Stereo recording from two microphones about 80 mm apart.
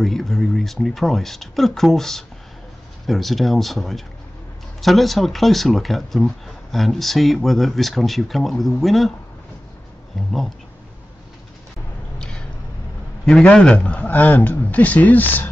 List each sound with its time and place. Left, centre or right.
0.0 s speech: centre
10.1 s speech: centre
12.2 s a sound: centre
13.2 s a man's voice: centre